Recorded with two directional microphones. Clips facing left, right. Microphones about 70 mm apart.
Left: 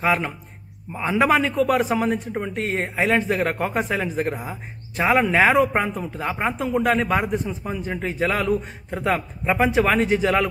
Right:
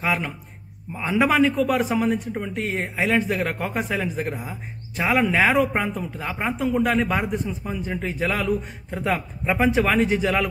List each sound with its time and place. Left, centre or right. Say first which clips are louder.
0.0 s a man's voice: left 3 dB; left